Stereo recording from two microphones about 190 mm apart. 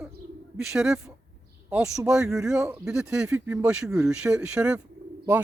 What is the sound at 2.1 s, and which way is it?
Speech, 5° right (ahead or behind).